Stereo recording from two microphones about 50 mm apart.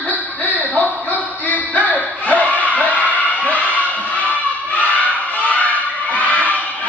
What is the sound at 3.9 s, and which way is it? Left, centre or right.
Music, left.